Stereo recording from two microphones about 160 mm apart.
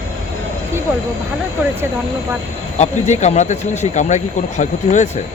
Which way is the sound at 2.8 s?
45° left (ahead or behind).